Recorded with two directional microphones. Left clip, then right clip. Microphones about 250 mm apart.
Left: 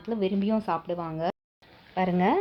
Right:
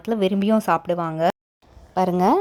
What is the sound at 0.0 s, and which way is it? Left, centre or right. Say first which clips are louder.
A woman's voice: right 7 dB; right.